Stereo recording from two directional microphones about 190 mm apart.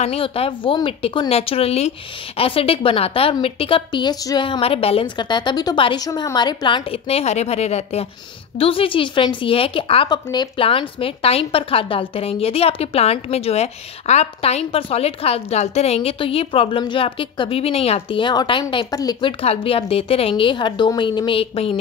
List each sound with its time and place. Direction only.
0.0 s a woman's voice: 30° left (ahead or behind)
19.4 s a woman's voice: 30° left (ahead or behind)